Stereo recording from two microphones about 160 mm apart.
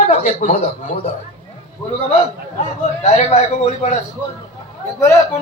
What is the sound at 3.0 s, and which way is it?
Speech, 45° left (ahead or behind).